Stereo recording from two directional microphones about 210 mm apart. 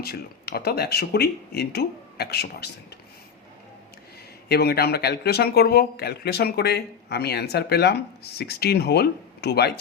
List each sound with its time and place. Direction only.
0.0 s a man's voice: 50° left (ahead or behind)
4.4 s a man's voice: 50° left (ahead or behind)